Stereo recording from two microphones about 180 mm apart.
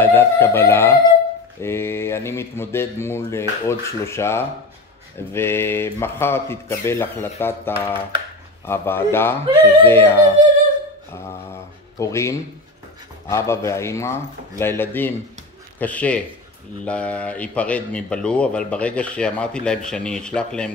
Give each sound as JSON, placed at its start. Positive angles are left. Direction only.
{"t": 0.0, "sound": "a sound", "side_deg": 10}
{"t": 1.6, "sound": "speech", "side_deg": 15}
{"t": 9.5, "sound": "speech", "side_deg": -30}
{"t": 9.8, "sound": "speech", "side_deg": 10}
{"t": 11.1, "sound": "mantra", "side_deg": 15}
{"t": 13.3, "sound": "speech", "side_deg": 15}